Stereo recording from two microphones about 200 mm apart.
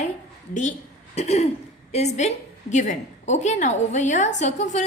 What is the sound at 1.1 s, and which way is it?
A woman's voice, 35° left (ahead or behind).